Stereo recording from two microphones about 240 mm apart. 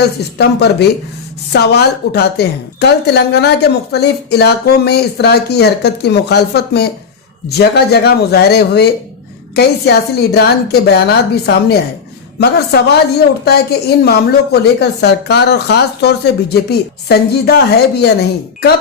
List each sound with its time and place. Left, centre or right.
0.2 s a woman's voice: left
10.3 s a woman's voice: left